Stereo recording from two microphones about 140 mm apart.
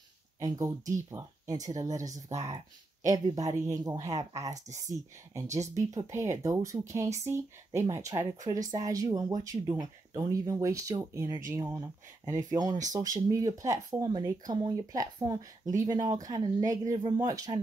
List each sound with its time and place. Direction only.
1.1 s speech: 25° right (ahead or behind)